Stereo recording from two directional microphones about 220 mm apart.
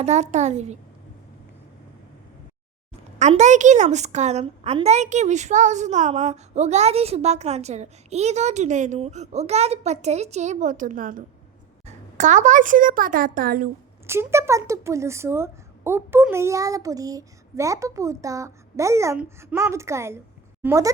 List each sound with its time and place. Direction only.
0.0 s a woman's voice: 30° right (ahead or behind)
3.2 s a woman's voice: 30° right (ahead or behind)
14.1 s speech: 10° right (ahead or behind)